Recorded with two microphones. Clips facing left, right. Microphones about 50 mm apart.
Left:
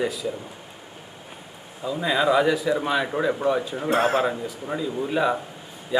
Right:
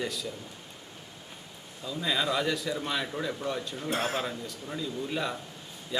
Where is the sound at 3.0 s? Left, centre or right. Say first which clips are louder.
Left 10 dB; left.